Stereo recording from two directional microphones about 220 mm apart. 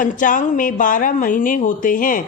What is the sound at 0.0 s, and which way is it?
Speech, 35° left (ahead or behind).